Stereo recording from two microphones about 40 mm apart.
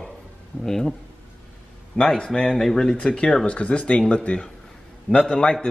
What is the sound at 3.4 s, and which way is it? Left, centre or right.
Speech, left.